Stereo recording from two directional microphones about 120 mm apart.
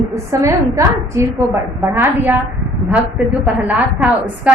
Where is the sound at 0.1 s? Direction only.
25° right (ahead or behind).